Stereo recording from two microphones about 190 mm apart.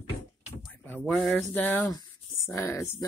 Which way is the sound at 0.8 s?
10° left (ahead or behind).